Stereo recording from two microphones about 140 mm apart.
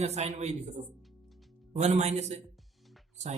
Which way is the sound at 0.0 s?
50° right (ahead or behind).